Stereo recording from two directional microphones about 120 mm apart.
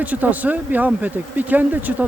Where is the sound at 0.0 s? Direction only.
10° right (ahead or behind).